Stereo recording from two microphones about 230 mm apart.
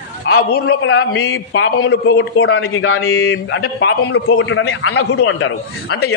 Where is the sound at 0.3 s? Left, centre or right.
Left.